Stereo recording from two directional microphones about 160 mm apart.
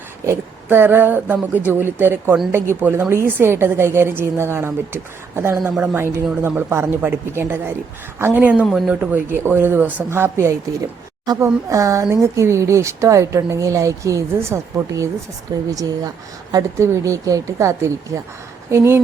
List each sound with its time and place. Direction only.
0.3 s a woman's voice: 15° right (ahead or behind)